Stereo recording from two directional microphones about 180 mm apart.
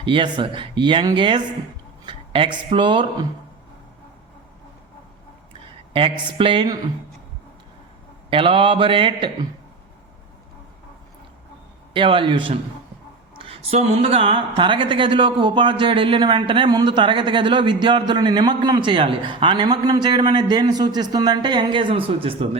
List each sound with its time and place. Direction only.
0.0 s a woman's voice: 25° right (ahead or behind)
5.9 s a woman's voice: 30° right (ahead or behind)
8.3 s a woman's voice: 30° right (ahead or behind)
11.9 s a woman's voice: 30° right (ahead or behind)